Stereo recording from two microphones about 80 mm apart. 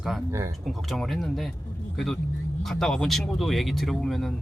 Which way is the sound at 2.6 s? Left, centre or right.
Centre.